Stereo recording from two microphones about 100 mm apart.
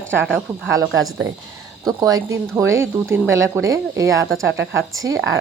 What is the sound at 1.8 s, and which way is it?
Speech, 40° right (ahead or behind).